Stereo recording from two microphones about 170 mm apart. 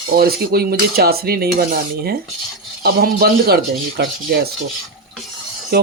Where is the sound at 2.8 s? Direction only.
65° right (ahead or behind).